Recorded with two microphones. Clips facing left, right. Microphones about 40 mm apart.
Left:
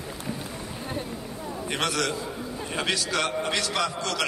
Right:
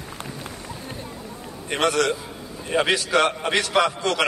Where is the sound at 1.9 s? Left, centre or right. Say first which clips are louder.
Right 8 dB; right.